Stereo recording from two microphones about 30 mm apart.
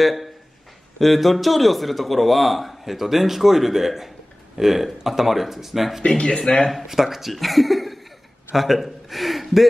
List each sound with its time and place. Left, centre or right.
0.0 s speech: centre
6.0 s speech: left
6.3 s speech: left
6.7 s a man's voice: centre